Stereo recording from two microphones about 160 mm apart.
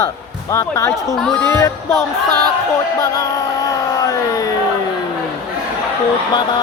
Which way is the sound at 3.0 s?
20° left (ahead or behind).